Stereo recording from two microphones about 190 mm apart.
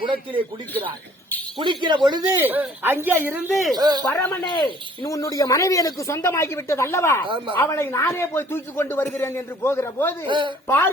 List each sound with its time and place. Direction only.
0.0 s a man's voice: 25° right (ahead or behind)
1.5 s a man's voice: 25° right (ahead or behind)
2.4 s speech: 10° right (ahead or behind)
3.5 s speech: centre (ahead or behind)
3.8 s a man's voice: 20° right (ahead or behind)
4.4 s speech: 25° left (ahead or behind)
7.3 s a man's voice: 25° right (ahead or behind)
7.5 s speech: 10° left (ahead or behind)
10.2 s a man's voice: 25° right (ahead or behind)
10.7 s speech: 10° left (ahead or behind)